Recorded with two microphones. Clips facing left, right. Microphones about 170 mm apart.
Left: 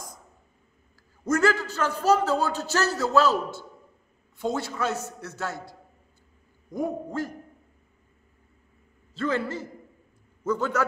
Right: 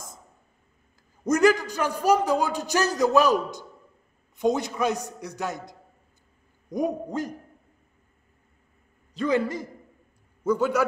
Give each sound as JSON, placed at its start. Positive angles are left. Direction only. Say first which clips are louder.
{"t": 1.2, "sound": "a man's voice", "louder": "right 3 dB", "side_deg": -15}
{"t": 9.1, "sound": "a man's voice", "louder": "right 3 dB", "side_deg": -15}